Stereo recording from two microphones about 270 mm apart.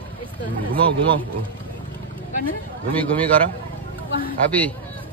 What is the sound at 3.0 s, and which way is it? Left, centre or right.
Speech, centre.